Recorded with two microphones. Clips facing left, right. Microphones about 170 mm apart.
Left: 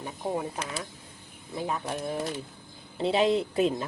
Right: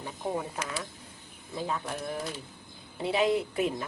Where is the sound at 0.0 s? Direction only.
15° left (ahead or behind).